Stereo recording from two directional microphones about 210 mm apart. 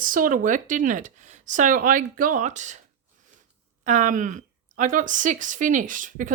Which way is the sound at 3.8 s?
35° right (ahead or behind).